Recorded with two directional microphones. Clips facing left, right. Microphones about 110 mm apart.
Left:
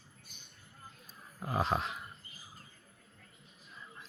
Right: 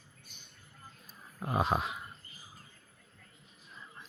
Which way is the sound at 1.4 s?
20° right (ahead or behind).